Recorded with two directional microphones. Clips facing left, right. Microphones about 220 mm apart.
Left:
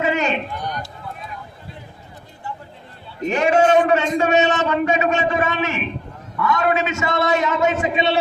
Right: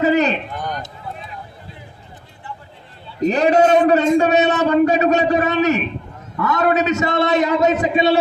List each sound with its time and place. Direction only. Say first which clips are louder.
0.0 s run: right 5 dB; 35° right (ahead or behind)
3.2 s a man's voice: right 3 dB; 35° right (ahead or behind)